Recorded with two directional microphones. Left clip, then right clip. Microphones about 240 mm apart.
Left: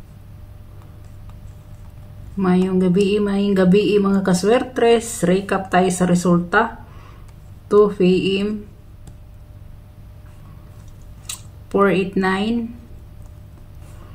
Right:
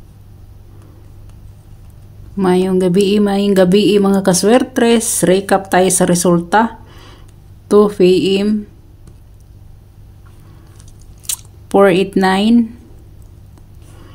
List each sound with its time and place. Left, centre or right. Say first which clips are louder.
2.3 s speech: right 6 dB; right
11.2 s speech: right 8 dB; right